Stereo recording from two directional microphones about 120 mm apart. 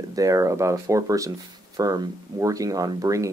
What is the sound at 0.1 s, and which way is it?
Speech, 30° right (ahead or behind).